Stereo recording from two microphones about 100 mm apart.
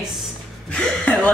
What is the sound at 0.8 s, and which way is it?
Speech, 10° left (ahead or behind).